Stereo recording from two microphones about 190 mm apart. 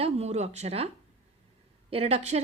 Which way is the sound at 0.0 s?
35° right (ahead or behind).